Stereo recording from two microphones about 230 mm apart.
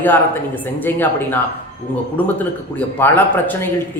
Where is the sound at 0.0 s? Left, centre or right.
Centre.